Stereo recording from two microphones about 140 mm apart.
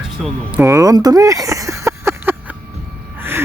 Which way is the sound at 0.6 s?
20° right (ahead or behind).